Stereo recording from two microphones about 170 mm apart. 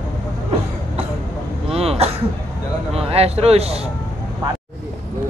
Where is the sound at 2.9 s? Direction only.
35° right (ahead or behind).